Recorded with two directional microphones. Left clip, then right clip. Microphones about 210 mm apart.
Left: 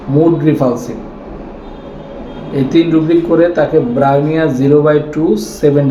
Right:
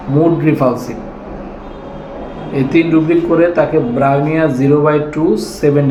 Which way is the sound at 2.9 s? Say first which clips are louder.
Left 1 dB; 5° left (ahead or behind).